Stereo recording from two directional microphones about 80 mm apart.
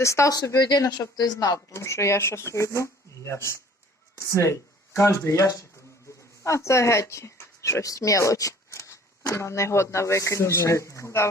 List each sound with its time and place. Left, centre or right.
0.0 s speech: left
0.3 s speech: left
1.7 s speech: left